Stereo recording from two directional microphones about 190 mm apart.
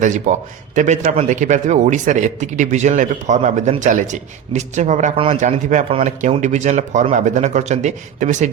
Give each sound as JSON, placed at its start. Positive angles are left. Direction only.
{"t": 0.0, "sound": "a man's voice", "side_deg": -40}